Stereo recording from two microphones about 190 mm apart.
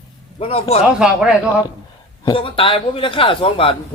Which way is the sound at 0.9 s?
5° right (ahead or behind).